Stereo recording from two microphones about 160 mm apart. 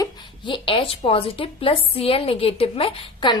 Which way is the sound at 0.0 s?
30° left (ahead or behind).